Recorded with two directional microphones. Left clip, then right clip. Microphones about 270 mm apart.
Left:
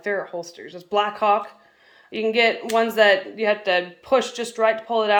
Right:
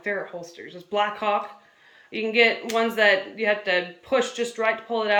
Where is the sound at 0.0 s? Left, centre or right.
Centre.